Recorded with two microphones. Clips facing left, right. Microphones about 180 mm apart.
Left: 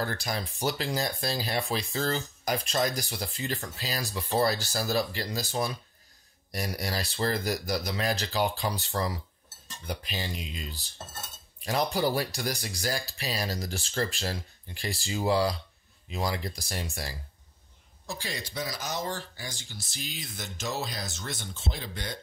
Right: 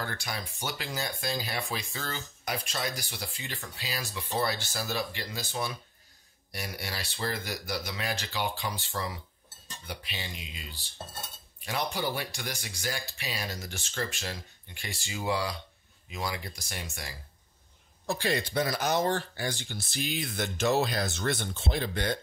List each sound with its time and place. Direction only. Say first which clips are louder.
0.0 s speech: left 5 dB; 35° left (ahead or behind)
18.0 s speech: right 8 dB; 60° right (ahead or behind)